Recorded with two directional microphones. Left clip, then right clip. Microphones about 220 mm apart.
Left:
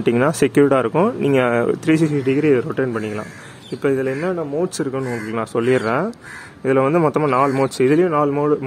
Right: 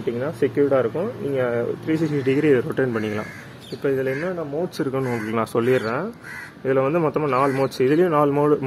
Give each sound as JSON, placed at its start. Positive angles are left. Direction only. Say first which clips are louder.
{"t": 0.0, "sound": "speech", "louder": "left 6 dB", "side_deg": 40}
{"t": 2.0, "sound": "speech", "louder": "left 3 dB", "side_deg": 15}
{"t": 3.8, "sound": "speech", "louder": "left 3 dB", "side_deg": 25}
{"t": 5.3, "sound": "a man's voice", "louder": "left 1 dB", "side_deg": 0}
{"t": 5.7, "sound": "speech", "louder": "left 4 dB", "side_deg": 15}
{"t": 8.1, "sound": "a man's voice", "louder": "left 1 dB", "side_deg": 5}